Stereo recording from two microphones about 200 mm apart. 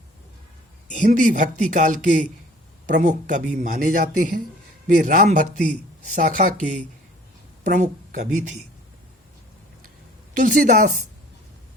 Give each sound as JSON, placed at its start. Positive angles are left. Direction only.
{"t": 0.9, "sound": "speech", "side_deg": -40}
{"t": 10.3, "sound": "speech", "side_deg": -40}